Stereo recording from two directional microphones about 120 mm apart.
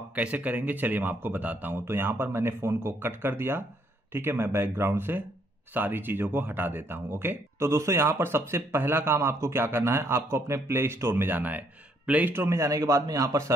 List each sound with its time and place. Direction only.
0.1 s speech: 10° right (ahead or behind)